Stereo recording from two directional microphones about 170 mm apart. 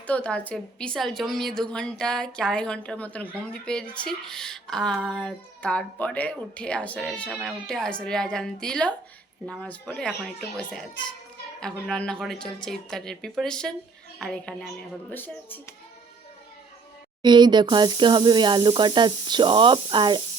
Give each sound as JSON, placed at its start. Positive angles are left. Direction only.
{"t": 0.1, "sound": "speech", "side_deg": 5}
{"t": 17.2, "sound": "speech", "side_deg": -25}